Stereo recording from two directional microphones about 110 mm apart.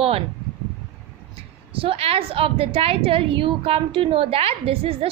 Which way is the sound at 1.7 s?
60° right (ahead or behind).